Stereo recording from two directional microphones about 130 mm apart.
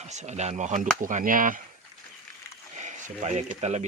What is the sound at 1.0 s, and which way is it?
Speech, 90° right.